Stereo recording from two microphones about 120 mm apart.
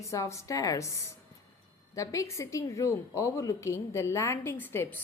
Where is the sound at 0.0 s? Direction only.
25° left (ahead or behind).